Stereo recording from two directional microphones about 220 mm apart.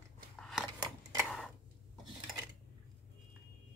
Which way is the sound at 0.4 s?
Centre (ahead or behind).